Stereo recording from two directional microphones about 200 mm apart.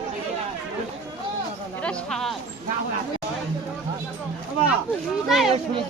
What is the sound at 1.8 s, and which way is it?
Speech, 5° left (ahead or behind).